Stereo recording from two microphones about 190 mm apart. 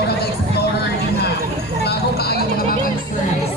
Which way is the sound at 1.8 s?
55° left (ahead or behind).